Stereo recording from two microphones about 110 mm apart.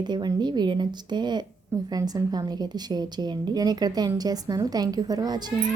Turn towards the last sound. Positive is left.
turn(degrees=-35)  # may be behind; listen again after turning